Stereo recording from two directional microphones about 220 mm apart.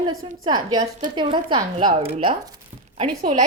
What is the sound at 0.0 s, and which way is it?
Speech, 20° right (ahead or behind).